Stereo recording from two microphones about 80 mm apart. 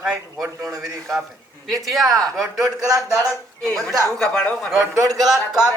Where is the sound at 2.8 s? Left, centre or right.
Right.